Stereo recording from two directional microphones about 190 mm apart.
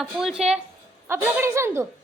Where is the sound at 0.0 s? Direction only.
Centre (ahead or behind).